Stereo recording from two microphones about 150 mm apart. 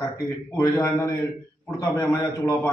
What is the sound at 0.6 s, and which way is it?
A man's voice, 15° left (ahead or behind).